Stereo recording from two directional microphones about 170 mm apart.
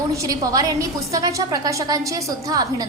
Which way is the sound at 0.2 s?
20° right (ahead or behind).